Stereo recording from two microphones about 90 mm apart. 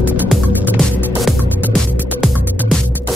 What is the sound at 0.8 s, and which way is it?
Music, 5° left (ahead or behind).